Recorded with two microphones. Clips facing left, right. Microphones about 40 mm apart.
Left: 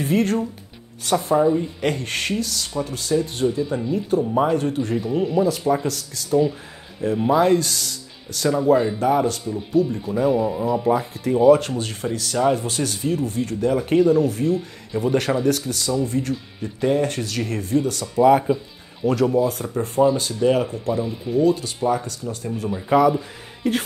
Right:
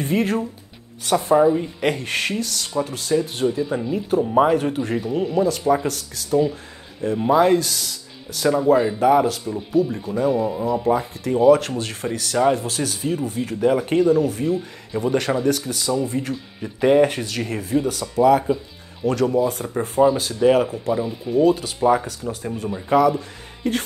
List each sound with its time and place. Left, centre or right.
0.0 s speech: centre
18.1 s speech: centre